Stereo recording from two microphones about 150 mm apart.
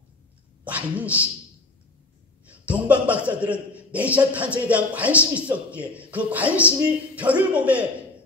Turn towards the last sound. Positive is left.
turn(degrees=-10)  # may be behind; listen again after turning